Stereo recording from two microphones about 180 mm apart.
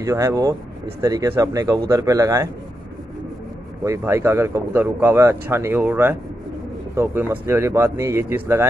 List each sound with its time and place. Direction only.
0.0 s speech: 15° right (ahead or behind)
3.8 s speech: 15° right (ahead or behind)